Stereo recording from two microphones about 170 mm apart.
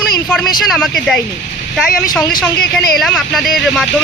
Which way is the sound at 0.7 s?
Centre (ahead or behind).